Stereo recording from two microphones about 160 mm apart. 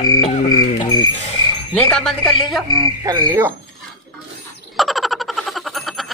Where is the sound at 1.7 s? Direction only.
5° left (ahead or behind).